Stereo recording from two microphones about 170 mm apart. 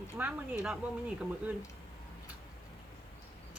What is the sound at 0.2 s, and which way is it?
Speech, 5° right (ahead or behind).